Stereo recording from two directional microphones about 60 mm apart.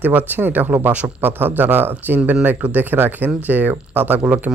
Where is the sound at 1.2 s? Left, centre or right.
Right.